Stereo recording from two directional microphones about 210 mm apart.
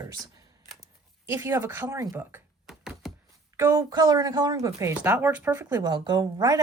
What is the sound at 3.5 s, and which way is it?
Speech, 15° right (ahead or behind).